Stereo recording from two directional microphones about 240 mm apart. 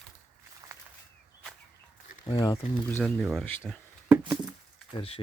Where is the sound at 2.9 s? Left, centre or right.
Centre.